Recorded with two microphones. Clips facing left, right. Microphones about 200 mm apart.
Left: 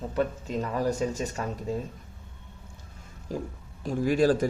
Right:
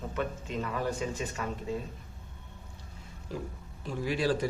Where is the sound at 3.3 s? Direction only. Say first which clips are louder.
Left 5 dB; 45° left (ahead or behind).